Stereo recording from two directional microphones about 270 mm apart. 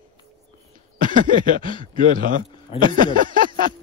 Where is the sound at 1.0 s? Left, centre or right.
Right.